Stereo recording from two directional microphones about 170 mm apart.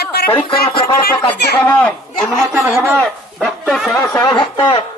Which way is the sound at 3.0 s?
5° left (ahead or behind).